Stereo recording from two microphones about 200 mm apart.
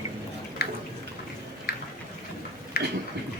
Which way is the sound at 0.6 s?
50° left (ahead or behind).